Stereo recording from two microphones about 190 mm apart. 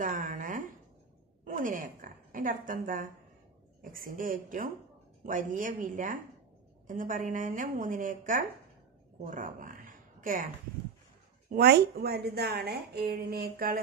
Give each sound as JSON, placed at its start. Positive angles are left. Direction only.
{"t": 0.0, "sound": "a sound", "side_deg": -45}
{"t": 1.4, "sound": "a woman's voice", "side_deg": -45}
{"t": 11.5, "sound": "a woman's voice", "side_deg": -55}